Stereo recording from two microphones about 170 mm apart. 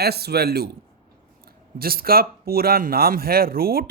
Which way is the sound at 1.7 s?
60° right (ahead or behind).